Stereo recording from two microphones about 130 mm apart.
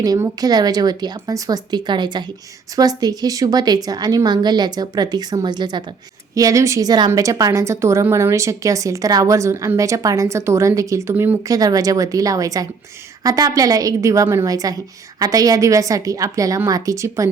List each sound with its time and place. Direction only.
0.0 s a woman's voice: 30° right (ahead or behind)
11.4 s a woman's voice: 25° right (ahead or behind)